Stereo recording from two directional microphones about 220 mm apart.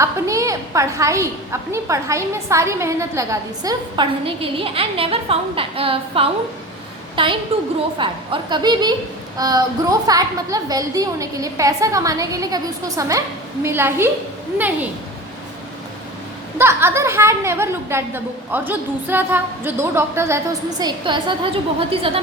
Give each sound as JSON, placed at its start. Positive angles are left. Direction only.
{"t": 0.0, "sound": "a woman's voice", "side_deg": -15}
{"t": 16.6, "sound": "a woman's voice", "side_deg": -10}